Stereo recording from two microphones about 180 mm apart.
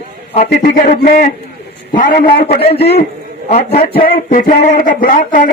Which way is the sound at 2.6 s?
35° left (ahead or behind).